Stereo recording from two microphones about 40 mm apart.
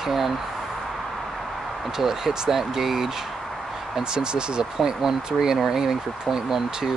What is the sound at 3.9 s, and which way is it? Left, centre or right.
Speech, centre.